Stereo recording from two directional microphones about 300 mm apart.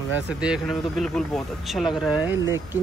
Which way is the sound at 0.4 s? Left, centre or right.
Centre.